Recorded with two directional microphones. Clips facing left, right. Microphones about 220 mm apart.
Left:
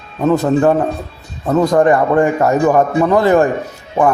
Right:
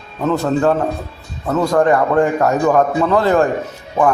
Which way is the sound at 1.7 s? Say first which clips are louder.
Even; 15° left (ahead or behind).